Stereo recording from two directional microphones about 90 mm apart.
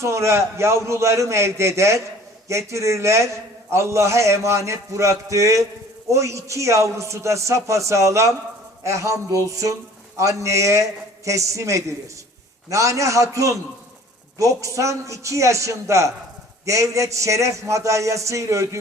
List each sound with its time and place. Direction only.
0.0 s a man's voice: 30° right (ahead or behind)